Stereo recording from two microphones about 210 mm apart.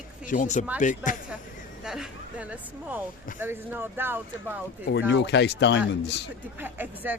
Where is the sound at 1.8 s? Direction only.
Centre (ahead or behind).